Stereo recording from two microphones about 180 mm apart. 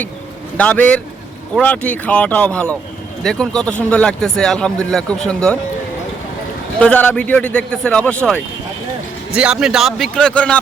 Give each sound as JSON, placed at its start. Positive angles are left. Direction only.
{"t": 0.5, "sound": "a man's voice", "side_deg": 10}
{"t": 6.7, "sound": "a man's voice", "side_deg": 5}
{"t": 9.3, "sound": "speech", "side_deg": -5}